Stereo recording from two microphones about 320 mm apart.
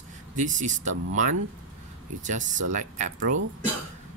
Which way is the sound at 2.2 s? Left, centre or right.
Right.